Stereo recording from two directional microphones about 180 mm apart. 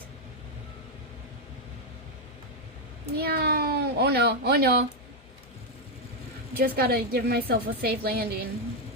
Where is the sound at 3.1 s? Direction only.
60° right (ahead or behind).